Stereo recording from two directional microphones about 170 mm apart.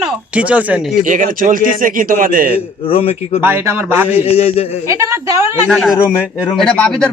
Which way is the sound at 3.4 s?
15° right (ahead or behind).